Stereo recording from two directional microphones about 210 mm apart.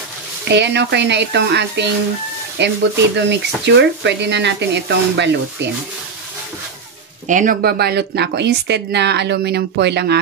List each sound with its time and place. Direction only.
0.5 s speech: 55° right (ahead or behind)
7.2 s speech: 40° right (ahead or behind)